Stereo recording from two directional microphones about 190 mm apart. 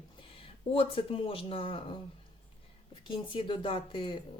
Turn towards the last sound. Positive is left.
turn(degrees=25)  # may be behind; listen again after turning